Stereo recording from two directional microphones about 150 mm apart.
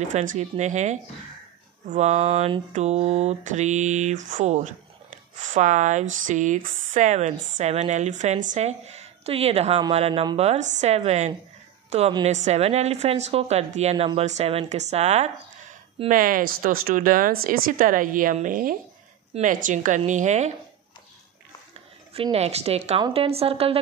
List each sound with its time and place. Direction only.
0.1 s a woman's voice: 55° right (ahead or behind)
16.1 s speech: 65° right (ahead or behind)
22.1 s a woman's voice: 40° right (ahead or behind)